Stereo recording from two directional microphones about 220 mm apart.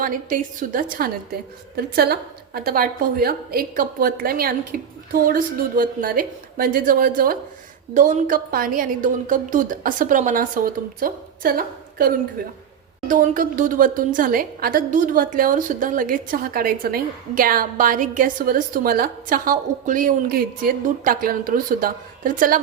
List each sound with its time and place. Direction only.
0.0 s a woman's voice: 40° right (ahead or behind)